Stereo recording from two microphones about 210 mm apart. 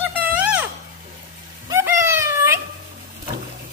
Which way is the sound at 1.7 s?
10° right (ahead or behind).